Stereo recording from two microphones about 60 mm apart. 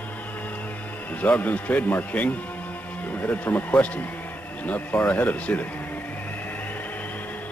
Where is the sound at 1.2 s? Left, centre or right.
Left.